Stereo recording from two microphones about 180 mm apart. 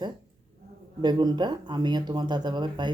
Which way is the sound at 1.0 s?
25° right (ahead or behind).